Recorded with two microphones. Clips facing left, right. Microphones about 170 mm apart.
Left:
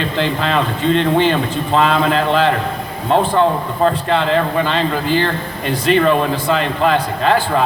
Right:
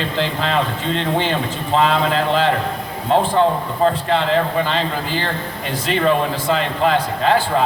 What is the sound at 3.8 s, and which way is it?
Speech, 60° left (ahead or behind).